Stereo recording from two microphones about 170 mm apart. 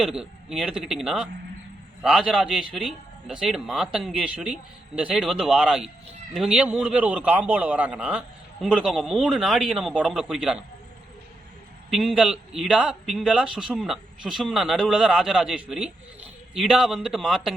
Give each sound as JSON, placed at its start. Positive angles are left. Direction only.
{"t": 0.0, "sound": "a man's voice", "side_deg": -5}
{"t": 11.9, "sound": "a man's voice", "side_deg": 0}